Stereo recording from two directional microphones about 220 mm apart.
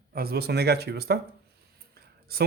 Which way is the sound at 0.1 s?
45° right (ahead or behind).